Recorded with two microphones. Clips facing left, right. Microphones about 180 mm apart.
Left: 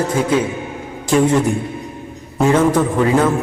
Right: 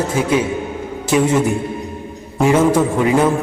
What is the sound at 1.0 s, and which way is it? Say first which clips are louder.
Speech: left 1 dB; 5° right (ahead or behind).